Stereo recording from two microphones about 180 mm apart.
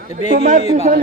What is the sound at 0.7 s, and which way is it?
Speech, 45° right (ahead or behind).